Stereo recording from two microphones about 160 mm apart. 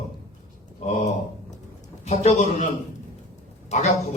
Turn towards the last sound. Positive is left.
turn(degrees=45)  # may be behind; listen again after turning